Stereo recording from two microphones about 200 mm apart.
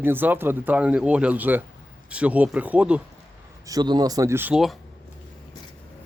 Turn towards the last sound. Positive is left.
turn(degrees=0)  # may be behind; listen again after turning